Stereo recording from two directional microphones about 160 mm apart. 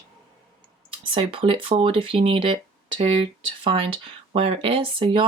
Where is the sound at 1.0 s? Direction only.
35° right (ahead or behind).